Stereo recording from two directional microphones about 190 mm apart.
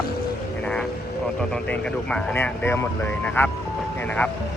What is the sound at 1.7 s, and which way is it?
Speech, 5° left (ahead or behind).